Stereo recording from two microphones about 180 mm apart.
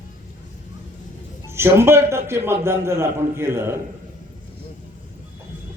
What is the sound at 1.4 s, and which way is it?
A man's voice, 15° right (ahead or behind).